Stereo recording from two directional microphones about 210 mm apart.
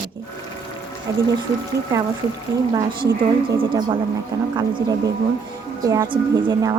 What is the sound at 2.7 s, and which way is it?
A woman's voice, 20° right (ahead or behind).